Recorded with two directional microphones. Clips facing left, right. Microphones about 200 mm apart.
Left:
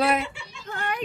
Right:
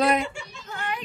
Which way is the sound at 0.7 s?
45° left (ahead or behind).